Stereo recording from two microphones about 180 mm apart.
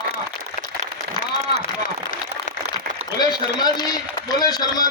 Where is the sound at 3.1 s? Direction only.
25° left (ahead or behind).